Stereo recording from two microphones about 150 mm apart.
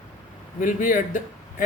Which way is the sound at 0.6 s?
65° left (ahead or behind).